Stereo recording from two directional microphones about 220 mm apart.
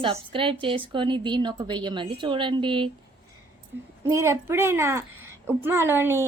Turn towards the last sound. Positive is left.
turn(degrees=-10)  # may be behind; listen again after turning